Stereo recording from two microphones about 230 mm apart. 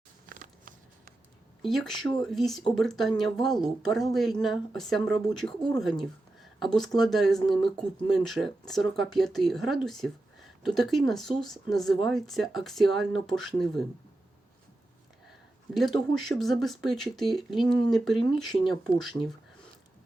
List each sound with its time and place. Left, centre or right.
0.3 s a sound: right
1.6 s speech: centre
16.2 s speech: centre